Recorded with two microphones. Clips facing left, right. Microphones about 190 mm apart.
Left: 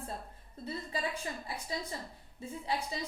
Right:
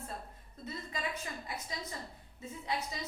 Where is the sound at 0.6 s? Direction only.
30° left (ahead or behind).